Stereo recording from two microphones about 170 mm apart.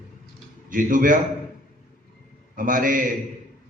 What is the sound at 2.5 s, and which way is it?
Speech, 55° right (ahead or behind).